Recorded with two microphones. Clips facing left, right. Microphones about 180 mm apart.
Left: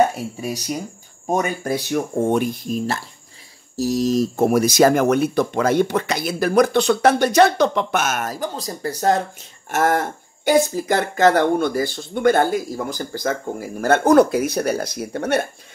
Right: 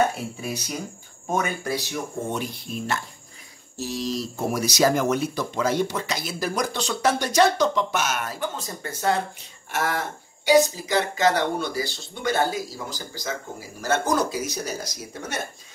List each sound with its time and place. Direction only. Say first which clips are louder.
0.4 s speech: left 5 dB; 45° left (ahead or behind); by 15.4 s 60° left (ahead or behind)